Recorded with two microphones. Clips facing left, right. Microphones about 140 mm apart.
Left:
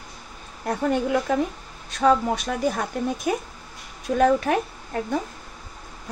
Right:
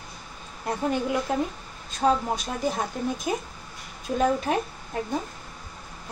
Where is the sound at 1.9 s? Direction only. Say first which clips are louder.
Left 4 dB; 75° left (ahead or behind).